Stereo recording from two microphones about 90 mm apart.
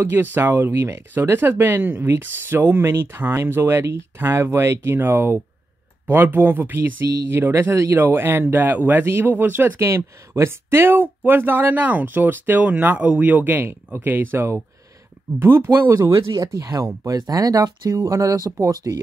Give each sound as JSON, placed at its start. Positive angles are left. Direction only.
{"t": 0.0, "sound": "speech", "side_deg": -25}
{"t": 9.8, "sound": "speech", "side_deg": -30}